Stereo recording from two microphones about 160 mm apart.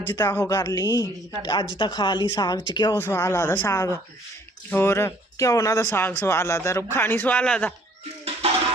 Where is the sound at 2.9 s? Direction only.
15° left (ahead or behind).